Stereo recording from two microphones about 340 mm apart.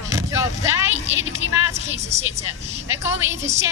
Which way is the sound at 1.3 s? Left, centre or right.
Centre.